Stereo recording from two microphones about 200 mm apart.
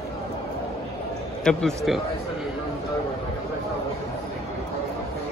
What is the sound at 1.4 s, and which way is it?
Speech, centre (ahead or behind).